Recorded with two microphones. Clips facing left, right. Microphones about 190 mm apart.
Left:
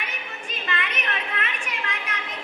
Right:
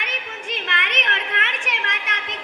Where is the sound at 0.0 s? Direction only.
90° right.